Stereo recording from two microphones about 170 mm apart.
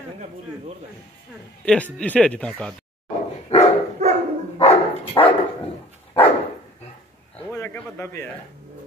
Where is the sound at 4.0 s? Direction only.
40° right (ahead or behind).